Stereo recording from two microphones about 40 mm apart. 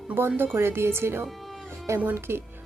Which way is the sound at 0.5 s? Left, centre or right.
Right.